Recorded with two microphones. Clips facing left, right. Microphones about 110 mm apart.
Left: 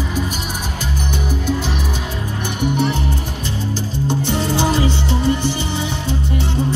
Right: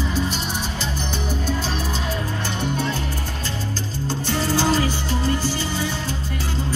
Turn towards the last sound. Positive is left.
turn(degrees=20)  # may be behind; listen again after turning